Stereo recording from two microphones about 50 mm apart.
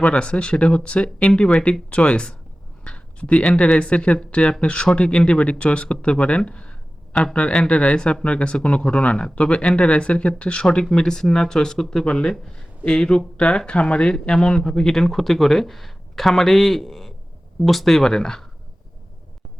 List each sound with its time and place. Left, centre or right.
0.0 s speech: left
7.1 s speech: centre
7.3 s speech: centre